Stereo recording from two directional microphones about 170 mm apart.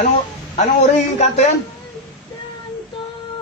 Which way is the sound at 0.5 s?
40° left (ahead or behind).